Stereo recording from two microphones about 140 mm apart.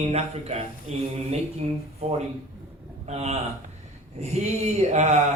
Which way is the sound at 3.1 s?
50° right (ahead or behind).